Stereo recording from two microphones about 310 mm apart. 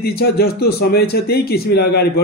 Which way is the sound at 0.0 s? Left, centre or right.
Left.